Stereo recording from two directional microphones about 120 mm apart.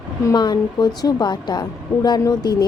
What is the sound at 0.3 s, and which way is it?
A woman's voice, 35° left (ahead or behind).